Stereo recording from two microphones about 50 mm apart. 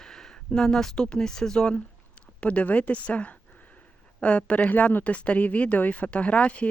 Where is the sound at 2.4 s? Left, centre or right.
Left.